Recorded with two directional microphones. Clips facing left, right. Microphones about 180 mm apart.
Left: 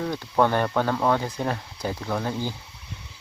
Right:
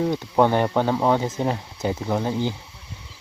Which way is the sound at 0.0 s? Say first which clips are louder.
Right 3 dB; 15° right (ahead or behind).